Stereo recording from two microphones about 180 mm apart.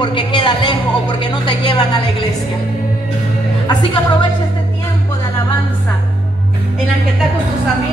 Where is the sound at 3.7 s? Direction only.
25° left (ahead or behind).